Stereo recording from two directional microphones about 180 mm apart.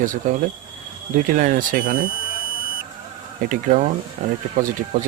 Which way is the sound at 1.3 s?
50° right (ahead or behind).